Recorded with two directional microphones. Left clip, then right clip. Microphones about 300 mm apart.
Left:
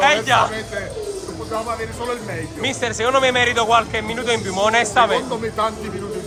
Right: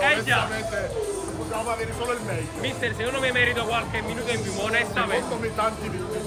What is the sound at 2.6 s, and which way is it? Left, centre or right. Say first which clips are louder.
Speech: left 7 dB; left.